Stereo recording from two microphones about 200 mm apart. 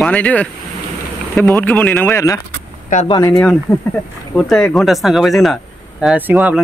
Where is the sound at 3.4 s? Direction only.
5° left (ahead or behind).